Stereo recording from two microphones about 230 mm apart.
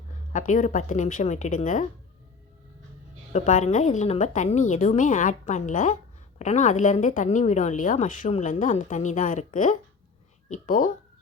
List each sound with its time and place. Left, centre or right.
0.3 s a woman's voice: left
3.3 s a woman's voice: left